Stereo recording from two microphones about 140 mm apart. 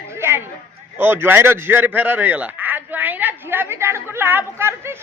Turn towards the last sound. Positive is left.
turn(degrees=-15)  # may be behind; listen again after turning